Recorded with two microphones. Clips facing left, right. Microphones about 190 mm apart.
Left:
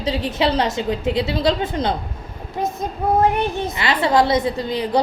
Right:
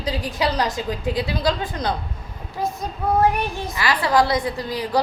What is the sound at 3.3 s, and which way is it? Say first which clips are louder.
A woman's voice: left 4 dB; 20° left (ahead or behind).